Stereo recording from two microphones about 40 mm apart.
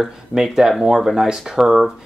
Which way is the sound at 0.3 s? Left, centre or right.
Centre.